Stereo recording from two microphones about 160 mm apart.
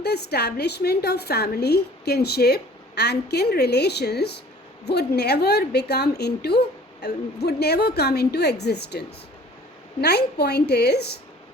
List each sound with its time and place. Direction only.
0.0 s a woman's voice: 90° left